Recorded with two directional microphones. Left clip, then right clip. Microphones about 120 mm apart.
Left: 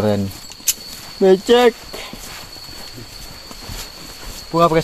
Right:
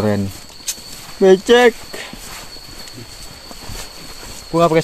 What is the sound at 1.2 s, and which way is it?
Speech, 25° right (ahead or behind).